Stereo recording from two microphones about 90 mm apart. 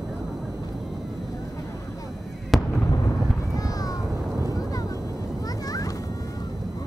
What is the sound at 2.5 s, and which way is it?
Fireworks, centre (ahead or behind).